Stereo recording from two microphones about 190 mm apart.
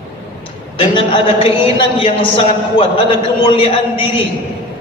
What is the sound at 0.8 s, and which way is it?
A man's voice, 25° left (ahead or behind).